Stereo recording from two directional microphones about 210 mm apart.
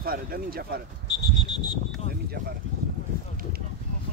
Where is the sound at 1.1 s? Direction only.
20° left (ahead or behind).